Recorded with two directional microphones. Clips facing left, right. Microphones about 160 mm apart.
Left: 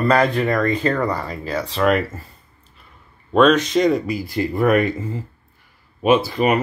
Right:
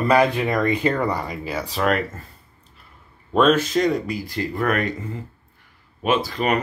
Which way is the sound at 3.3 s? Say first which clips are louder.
Left 3 dB; 5° right (ahead or behind).